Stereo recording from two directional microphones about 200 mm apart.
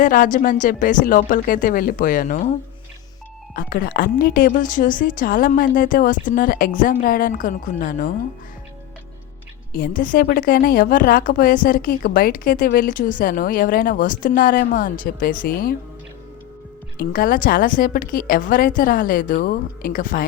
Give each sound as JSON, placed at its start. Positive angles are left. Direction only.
{"t": 0.0, "sound": "a woman's voice", "side_deg": 40}
{"t": 9.7, "sound": "a woman's voice", "side_deg": 45}
{"t": 17.0, "sound": "a woman's voice", "side_deg": 45}